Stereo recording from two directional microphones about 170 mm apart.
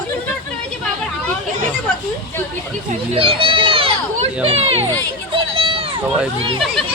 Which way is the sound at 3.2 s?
30° right (ahead or behind).